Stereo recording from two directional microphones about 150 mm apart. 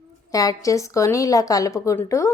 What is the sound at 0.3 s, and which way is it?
A woman's voice, 25° left (ahead or behind).